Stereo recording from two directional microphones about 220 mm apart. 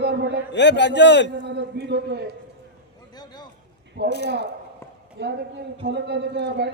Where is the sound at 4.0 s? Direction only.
50° right (ahead or behind).